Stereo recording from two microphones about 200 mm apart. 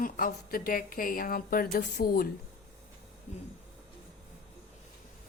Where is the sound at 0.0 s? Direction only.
45° left (ahead or behind).